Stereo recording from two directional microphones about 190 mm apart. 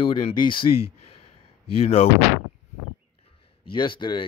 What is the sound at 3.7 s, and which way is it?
Speech, 25° left (ahead or behind).